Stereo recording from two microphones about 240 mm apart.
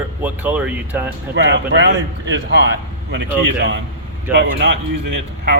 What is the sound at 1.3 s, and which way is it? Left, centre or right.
A man's voice, right.